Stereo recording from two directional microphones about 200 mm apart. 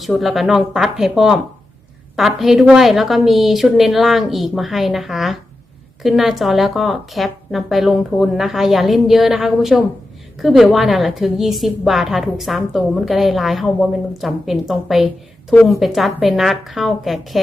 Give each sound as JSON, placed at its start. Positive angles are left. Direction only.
{"t": 0.0, "sound": "a woman's voice", "side_deg": 0}